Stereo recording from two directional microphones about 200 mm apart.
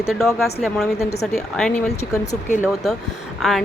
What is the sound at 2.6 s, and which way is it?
Speech, centre (ahead or behind).